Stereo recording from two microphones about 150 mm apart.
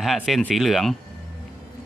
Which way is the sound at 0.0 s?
Centre (ahead or behind).